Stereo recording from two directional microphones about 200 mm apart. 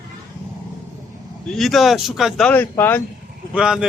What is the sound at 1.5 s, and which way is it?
Speech, centre (ahead or behind).